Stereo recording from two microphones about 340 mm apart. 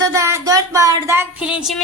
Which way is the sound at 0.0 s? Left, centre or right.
Centre.